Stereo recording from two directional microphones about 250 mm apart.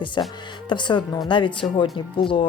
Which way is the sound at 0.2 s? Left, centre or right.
Centre.